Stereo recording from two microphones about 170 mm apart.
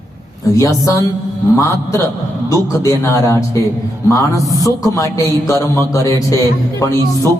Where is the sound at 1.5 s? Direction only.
15° left (ahead or behind).